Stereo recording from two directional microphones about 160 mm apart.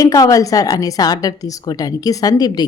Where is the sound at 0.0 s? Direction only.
20° left (ahead or behind).